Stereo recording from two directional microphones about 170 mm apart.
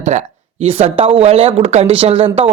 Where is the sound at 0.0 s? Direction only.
45° right (ahead or behind).